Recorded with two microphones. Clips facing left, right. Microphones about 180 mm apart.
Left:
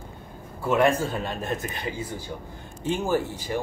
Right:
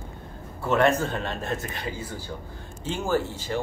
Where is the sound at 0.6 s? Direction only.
10° left (ahead or behind).